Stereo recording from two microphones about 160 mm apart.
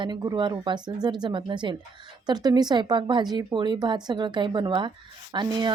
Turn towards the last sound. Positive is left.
turn(degrees=-25)  # may be behind; listen again after turning